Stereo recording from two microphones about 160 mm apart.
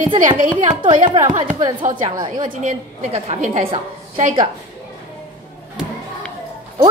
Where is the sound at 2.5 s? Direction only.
50° right (ahead or behind).